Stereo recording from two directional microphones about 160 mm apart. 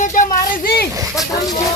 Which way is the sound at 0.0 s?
55° left (ahead or behind).